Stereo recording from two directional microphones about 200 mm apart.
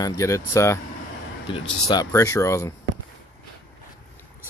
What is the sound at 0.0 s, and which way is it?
Speech, 15° left (ahead or behind).